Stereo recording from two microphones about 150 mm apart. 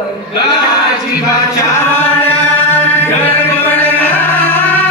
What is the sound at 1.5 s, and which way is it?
Chant, 15° left (ahead or behind).